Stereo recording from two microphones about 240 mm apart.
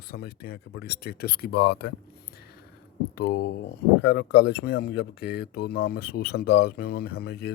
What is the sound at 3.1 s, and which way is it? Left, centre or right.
Speech, left.